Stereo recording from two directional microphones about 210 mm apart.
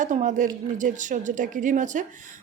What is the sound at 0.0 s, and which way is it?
A woman's voice, 35° right (ahead or behind).